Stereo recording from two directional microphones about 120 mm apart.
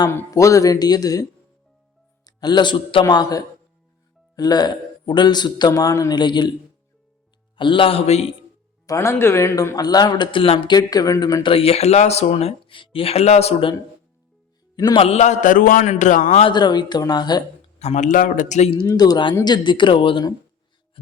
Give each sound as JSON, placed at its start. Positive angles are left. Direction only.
{"t": 0.1, "sound": "a man's voice", "side_deg": 25}
{"t": 7.5, "sound": "a man's voice", "side_deg": 45}
{"t": 8.9, "sound": "speech", "side_deg": 20}
{"t": 11.5, "sound": "speech", "side_deg": 55}
{"t": 14.9, "sound": "speech", "side_deg": 60}
{"t": 16.4, "sound": "speech", "side_deg": 40}
{"t": 17.7, "sound": "speech", "side_deg": 80}
{"t": 18.9, "sound": "speech", "side_deg": 35}